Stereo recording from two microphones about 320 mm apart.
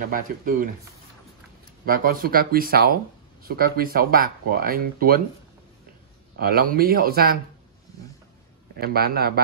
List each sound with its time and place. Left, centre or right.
0.1 s speech: right
1.9 s speech: right
6.3 s speech: right
8.7 s speech: right